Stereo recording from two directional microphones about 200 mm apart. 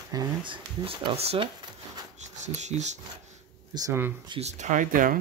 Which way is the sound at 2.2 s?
35° right (ahead or behind).